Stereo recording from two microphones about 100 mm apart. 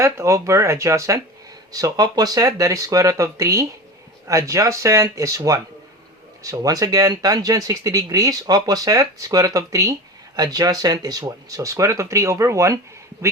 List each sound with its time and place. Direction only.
0.0 s speech: 30° right (ahead or behind)